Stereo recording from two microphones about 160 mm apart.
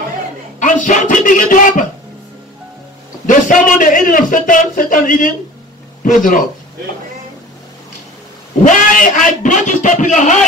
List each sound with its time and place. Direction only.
0.6 s speech: 50° left (ahead or behind)
3.3 s a man's voice: 55° left (ahead or behind)
8.6 s a man's voice: 55° left (ahead or behind)